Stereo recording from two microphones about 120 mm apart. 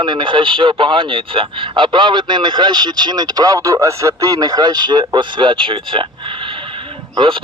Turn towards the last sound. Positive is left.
turn(degrees=-45)  # may be behind; listen again after turning